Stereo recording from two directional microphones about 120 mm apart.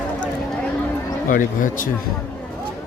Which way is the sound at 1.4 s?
90° left.